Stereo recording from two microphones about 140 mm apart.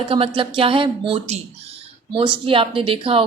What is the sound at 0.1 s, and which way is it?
A woman's voice, 40° right (ahead or behind).